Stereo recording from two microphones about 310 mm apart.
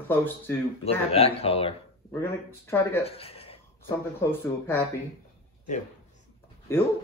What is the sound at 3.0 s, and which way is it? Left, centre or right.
Speech, centre.